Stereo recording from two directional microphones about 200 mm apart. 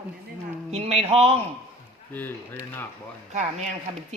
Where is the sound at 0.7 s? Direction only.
30° right (ahead or behind).